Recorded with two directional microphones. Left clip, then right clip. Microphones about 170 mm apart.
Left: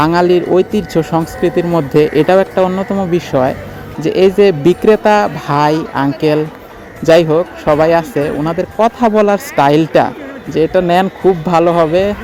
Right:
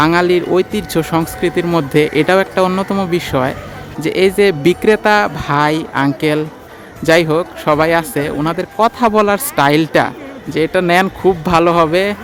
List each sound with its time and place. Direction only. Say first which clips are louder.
0.0 s speech: left 1 dB; 5° right (ahead or behind)
2.6 s speech: even; 20° right (ahead or behind)
3.1 s speech: left 3 dB; 5° right (ahead or behind)